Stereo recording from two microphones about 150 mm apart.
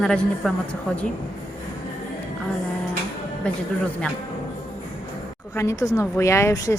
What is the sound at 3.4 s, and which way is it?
Speech, 5° left (ahead or behind).